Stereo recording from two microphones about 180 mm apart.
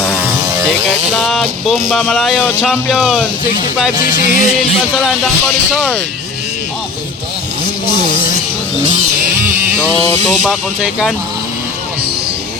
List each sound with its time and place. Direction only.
0.9 s speech: centre (ahead or behind)
4.0 s music: 50° left (ahead or behind)
4.9 s speech: centre (ahead or behind)
10.4 s speech: 5° right (ahead or behind)